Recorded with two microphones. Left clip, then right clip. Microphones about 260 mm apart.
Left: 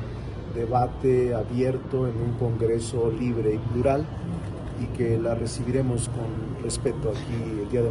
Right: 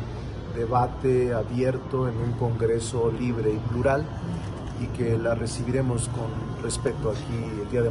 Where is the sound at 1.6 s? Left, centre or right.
Centre.